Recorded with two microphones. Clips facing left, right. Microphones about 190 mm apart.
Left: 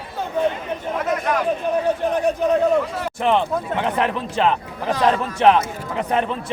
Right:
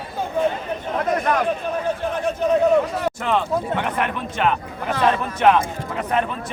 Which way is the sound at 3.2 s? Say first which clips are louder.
Left 5 dB; 20° left (ahead or behind).